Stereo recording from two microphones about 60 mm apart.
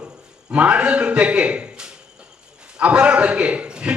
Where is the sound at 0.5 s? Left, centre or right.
Centre.